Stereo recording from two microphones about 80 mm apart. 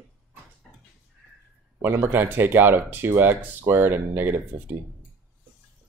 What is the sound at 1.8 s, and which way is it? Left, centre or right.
Speech, right.